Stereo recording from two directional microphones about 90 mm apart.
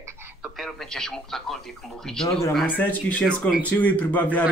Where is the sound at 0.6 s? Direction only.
5° left (ahead or behind).